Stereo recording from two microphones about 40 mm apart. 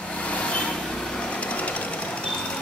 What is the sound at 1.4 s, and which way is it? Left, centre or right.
Sewing machine, left.